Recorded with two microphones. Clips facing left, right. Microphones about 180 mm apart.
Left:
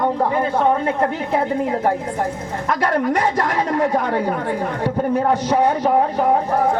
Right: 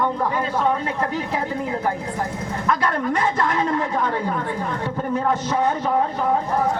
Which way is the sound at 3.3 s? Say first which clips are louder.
Left 2 dB; 40° left (ahead or behind).